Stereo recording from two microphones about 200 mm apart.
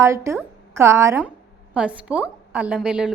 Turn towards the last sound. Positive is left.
turn(degrees=-5)  # may be behind; listen again after turning